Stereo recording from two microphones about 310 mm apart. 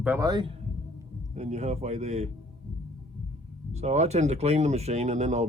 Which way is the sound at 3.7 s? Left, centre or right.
Right.